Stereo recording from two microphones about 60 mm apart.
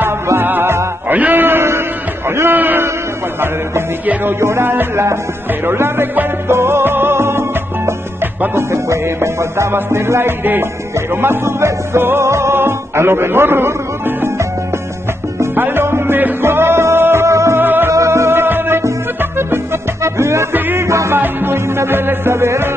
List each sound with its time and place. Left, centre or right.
0.4 s music: right
1.0 s a sound: right
4.0 s music: right
4.4 s music: right
15.5 s music: right
17.6 s music: right
17.9 s music: right
20.5 s music: right